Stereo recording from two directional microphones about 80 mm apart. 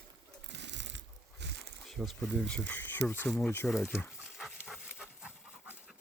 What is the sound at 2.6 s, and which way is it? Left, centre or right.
Speech, left.